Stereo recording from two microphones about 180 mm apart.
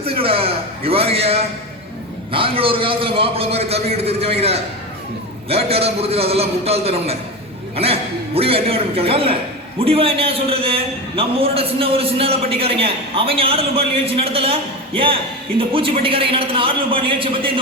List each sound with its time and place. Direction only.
0.0 s a man's voice: 30° right (ahead or behind)
8.4 s a man's voice: 30° right (ahead or behind)